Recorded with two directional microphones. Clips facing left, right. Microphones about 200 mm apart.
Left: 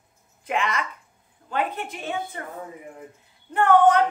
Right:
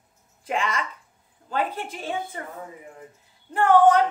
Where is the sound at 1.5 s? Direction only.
35° right (ahead or behind).